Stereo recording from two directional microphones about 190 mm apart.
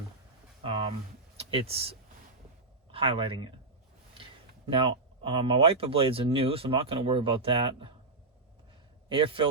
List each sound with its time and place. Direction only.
0.6 s a sound: 30° right (ahead or behind)
1.4 s speech: 30° right (ahead or behind)
4.7 s speech: 30° right (ahead or behind)
9.0 s a man's voice: 25° right (ahead or behind)